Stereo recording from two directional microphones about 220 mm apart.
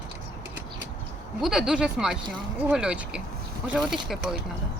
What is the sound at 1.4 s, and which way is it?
Speech, centre (ahead or behind).